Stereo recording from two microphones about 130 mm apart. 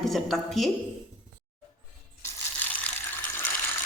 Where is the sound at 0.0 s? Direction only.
Centre (ahead or behind).